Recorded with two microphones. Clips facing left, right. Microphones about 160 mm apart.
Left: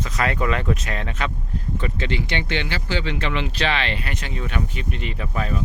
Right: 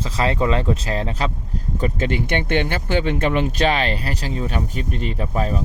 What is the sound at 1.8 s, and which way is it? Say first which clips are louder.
Speech: right 6 dB; 45° right (ahead or behind).